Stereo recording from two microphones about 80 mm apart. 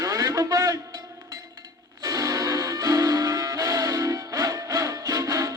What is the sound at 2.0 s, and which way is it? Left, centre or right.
Music, right.